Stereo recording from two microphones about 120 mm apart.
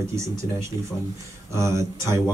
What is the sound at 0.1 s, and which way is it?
Speech, 25° right (ahead or behind).